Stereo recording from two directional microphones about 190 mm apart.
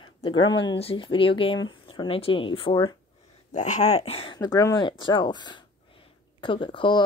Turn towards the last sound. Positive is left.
turn(degrees=25)  # may be behind; listen again after turning